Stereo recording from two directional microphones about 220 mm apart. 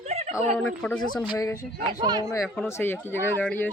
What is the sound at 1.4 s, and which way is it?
Speech, 15° left (ahead or behind).